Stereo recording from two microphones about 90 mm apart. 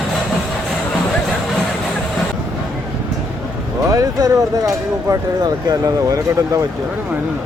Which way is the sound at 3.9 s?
40° right (ahead or behind).